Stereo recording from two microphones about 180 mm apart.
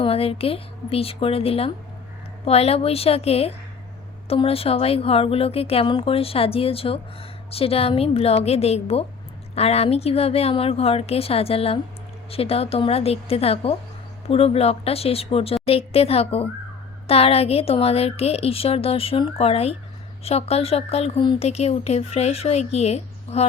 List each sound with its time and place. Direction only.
0.0 s speech: 30° left (ahead or behind)